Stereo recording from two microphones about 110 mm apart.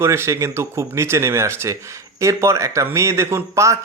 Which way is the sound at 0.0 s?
25° right (ahead or behind).